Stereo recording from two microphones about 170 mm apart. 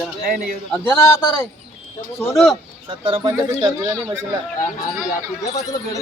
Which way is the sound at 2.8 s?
30° right (ahead or behind).